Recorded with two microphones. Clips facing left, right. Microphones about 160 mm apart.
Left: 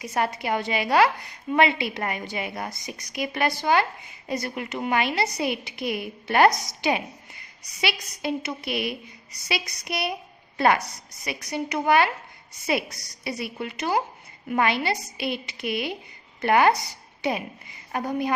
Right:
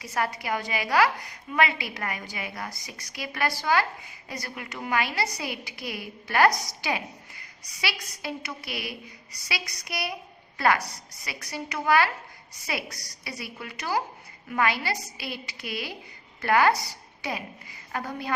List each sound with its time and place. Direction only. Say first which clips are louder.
0.0 s a woman's voice: left 3 dB; 20° left (ahead or behind)